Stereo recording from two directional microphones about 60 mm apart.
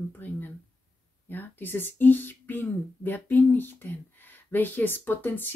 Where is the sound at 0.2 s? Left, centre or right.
Left.